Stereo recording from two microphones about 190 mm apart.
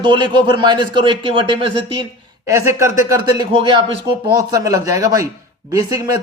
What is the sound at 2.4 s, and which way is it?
Speech, 15° right (ahead or behind).